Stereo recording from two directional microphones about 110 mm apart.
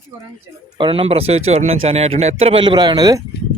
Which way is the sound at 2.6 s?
45° right (ahead or behind).